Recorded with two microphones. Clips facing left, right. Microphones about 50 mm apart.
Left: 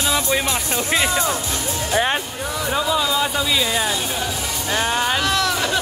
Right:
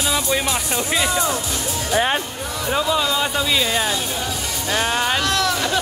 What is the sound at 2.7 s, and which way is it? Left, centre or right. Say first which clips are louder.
A man's voice: right 1 dB; centre.